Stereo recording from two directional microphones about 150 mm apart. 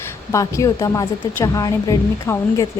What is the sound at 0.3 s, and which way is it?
A woman's voice, 20° left (ahead or behind).